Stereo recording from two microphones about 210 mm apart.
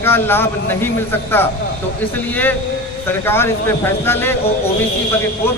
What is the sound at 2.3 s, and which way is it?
Speech, 10° left (ahead or behind).